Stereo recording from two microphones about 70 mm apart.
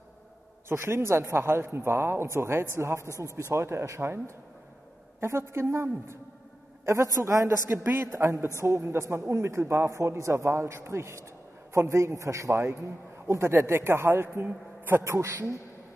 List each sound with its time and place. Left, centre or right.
0.7 s a man's voice: right
5.2 s a man's voice: right
15.1 s a man's voice: right